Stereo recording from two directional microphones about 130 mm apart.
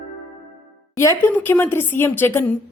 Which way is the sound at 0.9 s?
20° left (ahead or behind).